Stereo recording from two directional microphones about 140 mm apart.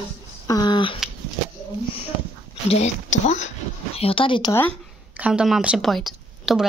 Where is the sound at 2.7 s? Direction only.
55° left (ahead or behind).